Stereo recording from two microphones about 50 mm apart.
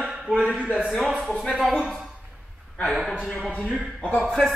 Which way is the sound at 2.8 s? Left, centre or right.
Centre.